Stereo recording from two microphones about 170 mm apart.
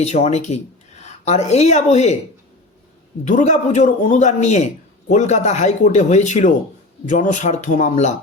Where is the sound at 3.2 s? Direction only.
45° left (ahead or behind).